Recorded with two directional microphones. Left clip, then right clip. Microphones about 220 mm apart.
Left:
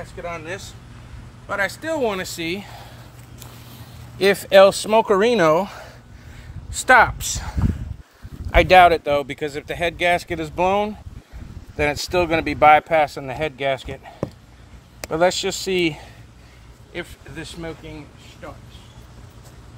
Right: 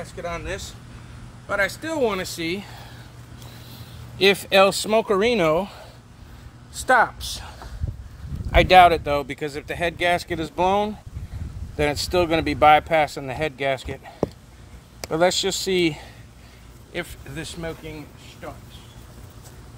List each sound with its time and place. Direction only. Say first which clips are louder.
0.0 s speech: even; 5° left (ahead or behind)
1.5 s speech: left 1 dB; 15° left (ahead or behind); by 2.9 s 35° left (ahead or behind)
4.3 s speech: left 5 dB; 15° left (ahead or behind)
5.0 s speech: left 3 dB; 20° left (ahead or behind)
6.9 s speech: left 5 dB; 30° left (ahead or behind)
8.5 s speech: left 1 dB; 20° left (ahead or behind)
12.4 s speech: left 2 dB; centre (ahead or behind)
16.9 s speech: right 1 dB; 30° right (ahead or behind)